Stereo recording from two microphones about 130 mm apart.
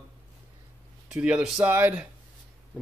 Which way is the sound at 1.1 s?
5° right (ahead or behind).